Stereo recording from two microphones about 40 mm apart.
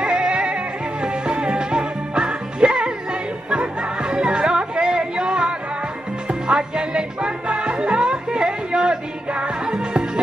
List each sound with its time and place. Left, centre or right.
0.0 s music: right